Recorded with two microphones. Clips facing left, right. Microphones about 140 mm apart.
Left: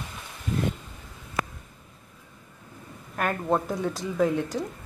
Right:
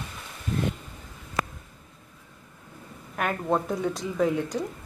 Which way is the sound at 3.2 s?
Centre (ahead or behind).